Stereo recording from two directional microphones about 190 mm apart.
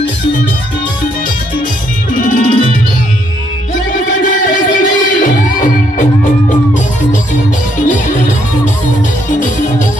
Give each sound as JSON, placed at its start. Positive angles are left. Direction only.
{"t": 2.1, "sound": "music", "side_deg": 45}
{"t": 4.1, "sound": "music", "side_deg": 45}